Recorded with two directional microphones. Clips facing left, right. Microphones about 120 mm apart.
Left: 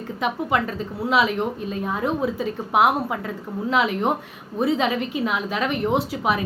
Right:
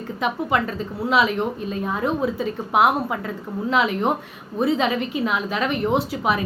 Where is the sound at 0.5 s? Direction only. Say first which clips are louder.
Right 1 dB; 10° left (ahead or behind).